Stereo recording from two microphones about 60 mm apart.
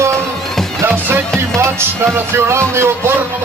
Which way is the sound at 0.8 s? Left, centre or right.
Right.